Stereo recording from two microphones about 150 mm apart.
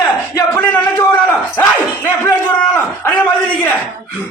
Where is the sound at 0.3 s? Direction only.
10° left (ahead or behind).